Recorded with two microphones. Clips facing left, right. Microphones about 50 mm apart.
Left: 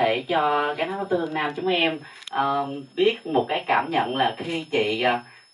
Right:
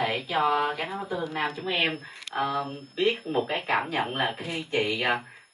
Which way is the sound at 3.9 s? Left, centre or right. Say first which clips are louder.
Left 5 dB; left.